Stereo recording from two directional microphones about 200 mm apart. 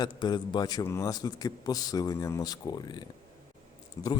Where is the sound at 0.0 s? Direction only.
20° left (ahead or behind).